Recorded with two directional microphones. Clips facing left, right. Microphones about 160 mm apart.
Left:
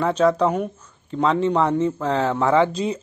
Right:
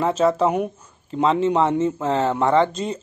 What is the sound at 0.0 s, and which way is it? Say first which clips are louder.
Speech: even; 5° right (ahead or behind).